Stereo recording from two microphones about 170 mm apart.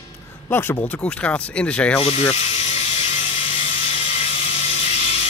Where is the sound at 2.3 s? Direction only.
40° left (ahead or behind).